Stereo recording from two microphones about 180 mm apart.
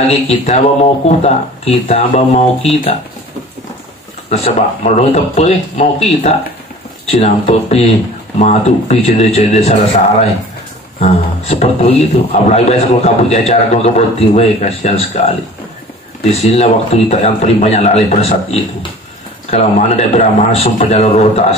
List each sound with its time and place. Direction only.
0.3 s a man's voice: 40° left (ahead or behind)
4.3 s a man's voice: 40° left (ahead or behind)
11.0 s a man's voice: 35° left (ahead or behind)
16.3 s a man's voice: 35° left (ahead or behind)